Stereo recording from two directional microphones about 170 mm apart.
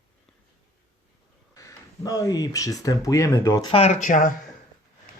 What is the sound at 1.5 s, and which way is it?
Speech, 20° left (ahead or behind).